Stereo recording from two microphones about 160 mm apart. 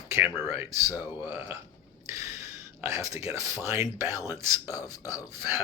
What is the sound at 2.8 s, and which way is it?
Speech, 20° right (ahead or behind).